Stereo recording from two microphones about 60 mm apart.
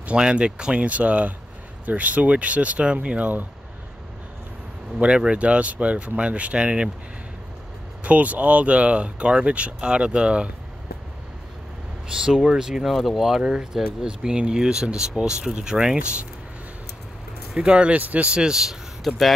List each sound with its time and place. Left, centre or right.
0.0 s speech: centre
4.9 s speech: centre
8.0 s speech: right
12.1 s speech: centre
17.6 s speech: centre